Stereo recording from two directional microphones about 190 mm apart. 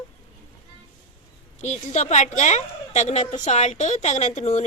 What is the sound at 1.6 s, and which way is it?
Speech, 35° left (ahead or behind).